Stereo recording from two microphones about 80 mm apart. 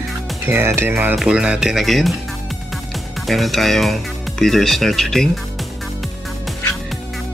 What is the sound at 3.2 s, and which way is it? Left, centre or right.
Speech, centre.